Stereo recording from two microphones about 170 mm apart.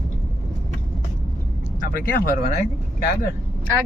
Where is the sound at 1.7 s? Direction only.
55° left (ahead or behind).